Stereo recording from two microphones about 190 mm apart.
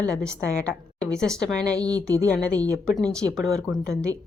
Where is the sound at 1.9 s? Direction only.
20° right (ahead or behind).